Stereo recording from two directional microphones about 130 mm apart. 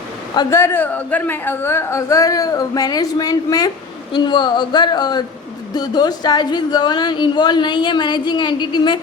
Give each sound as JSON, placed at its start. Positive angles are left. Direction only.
{"t": 0.5, "sound": "a woman's voice", "side_deg": 15}